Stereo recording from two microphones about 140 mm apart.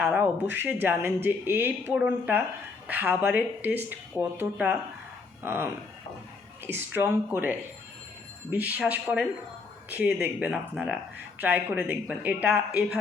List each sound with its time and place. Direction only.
0.0 s speech: 15° right (ahead or behind)
6.7 s speech: 15° right (ahead or behind)